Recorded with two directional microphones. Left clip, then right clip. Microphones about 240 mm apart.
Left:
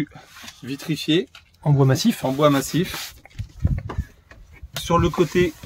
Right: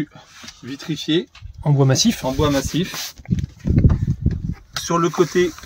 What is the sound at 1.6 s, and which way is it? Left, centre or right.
Speech, centre.